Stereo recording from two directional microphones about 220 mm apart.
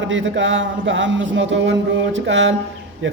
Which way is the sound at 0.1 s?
60° right (ahead or behind).